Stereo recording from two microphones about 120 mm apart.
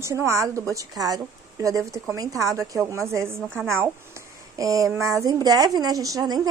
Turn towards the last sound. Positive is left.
turn(degrees=-35)  # may be behind; listen again after turning